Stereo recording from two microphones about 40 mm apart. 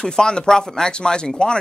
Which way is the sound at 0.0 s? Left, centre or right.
Centre.